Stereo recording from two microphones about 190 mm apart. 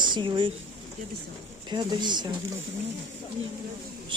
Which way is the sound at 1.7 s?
20° right (ahead or behind).